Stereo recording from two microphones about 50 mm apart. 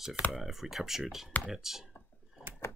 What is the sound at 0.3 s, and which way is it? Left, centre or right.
Speech, centre.